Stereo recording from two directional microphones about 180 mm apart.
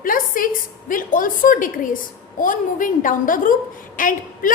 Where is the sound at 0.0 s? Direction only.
50° left (ahead or behind).